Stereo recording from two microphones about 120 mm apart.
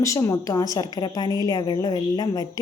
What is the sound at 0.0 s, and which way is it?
A woman's voice, 25° left (ahead or behind).